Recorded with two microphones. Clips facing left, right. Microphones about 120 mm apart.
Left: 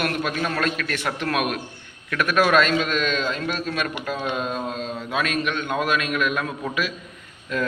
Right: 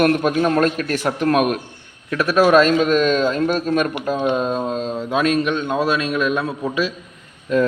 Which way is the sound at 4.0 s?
25° right (ahead or behind).